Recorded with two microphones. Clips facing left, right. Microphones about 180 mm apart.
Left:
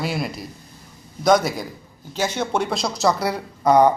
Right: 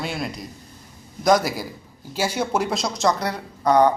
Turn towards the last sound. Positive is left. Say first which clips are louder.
# left 2 dB
turn(degrees=10)  # may be behind; listen again after turning